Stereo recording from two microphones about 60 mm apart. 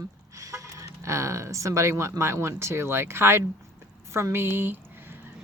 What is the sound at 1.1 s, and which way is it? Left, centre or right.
Speech, right.